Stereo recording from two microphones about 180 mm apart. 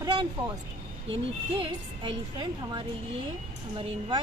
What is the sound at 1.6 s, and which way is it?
Speech, 25° right (ahead or behind).